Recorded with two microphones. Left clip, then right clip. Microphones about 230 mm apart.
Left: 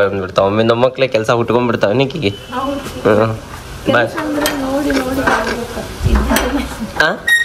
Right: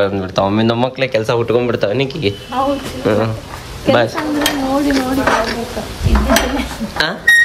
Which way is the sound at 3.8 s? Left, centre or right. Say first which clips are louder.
Right 1 dB; centre.